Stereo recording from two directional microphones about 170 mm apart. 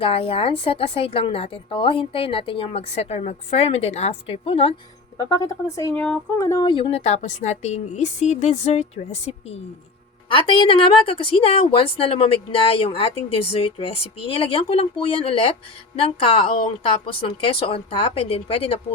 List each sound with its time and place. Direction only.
0.0 s a woman's voice: 35° left (ahead or behind)
5.1 s a woman's voice: 20° left (ahead or behind)